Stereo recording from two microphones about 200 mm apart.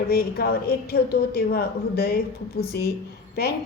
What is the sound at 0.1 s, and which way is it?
A woman's voice, 50° left (ahead or behind).